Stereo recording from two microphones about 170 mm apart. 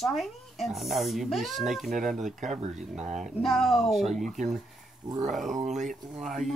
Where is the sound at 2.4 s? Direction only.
45° right (ahead or behind).